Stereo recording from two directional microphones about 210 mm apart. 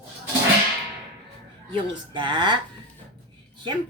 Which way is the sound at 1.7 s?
20° right (ahead or behind).